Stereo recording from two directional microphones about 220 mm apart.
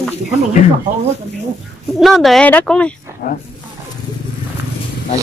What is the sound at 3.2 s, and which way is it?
Speech, 40° left (ahead or behind).